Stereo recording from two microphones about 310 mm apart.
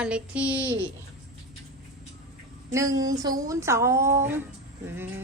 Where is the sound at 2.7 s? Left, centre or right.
Centre.